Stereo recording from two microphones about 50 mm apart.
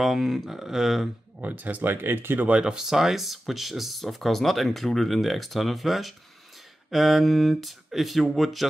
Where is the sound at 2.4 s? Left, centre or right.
Right.